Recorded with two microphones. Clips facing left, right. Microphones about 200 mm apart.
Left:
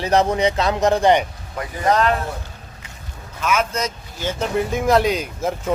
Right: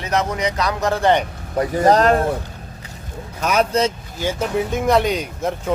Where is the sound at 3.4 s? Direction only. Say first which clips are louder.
Right 4 dB; 35° right (ahead or behind).